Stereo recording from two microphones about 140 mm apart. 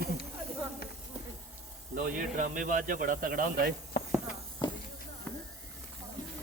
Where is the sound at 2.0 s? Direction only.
75° right (ahead or behind); by 3.8 s 90° right.